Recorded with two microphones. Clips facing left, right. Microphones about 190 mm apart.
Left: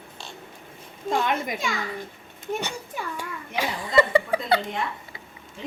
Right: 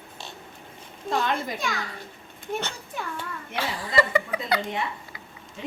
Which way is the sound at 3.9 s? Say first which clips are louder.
Left 4 dB; 30° left (ahead or behind).